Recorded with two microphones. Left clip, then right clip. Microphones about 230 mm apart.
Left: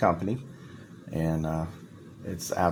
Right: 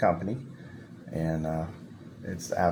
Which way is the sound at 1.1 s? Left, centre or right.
Left.